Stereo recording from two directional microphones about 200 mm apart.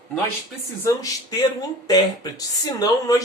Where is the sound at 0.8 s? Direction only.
15° left (ahead or behind).